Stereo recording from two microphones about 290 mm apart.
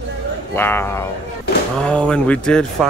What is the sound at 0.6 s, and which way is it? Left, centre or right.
Speech, centre.